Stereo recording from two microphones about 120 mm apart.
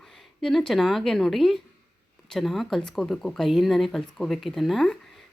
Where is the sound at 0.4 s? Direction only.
Centre (ahead or behind).